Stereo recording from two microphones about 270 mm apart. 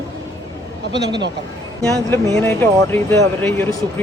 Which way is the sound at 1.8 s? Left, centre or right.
Centre.